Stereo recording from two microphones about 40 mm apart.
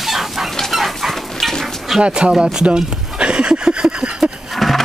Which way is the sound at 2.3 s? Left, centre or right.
Centre.